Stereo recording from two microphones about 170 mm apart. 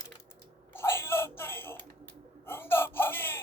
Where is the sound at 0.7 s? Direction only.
15° left (ahead or behind).